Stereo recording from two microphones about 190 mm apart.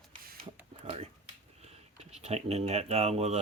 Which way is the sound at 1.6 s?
35° right (ahead or behind).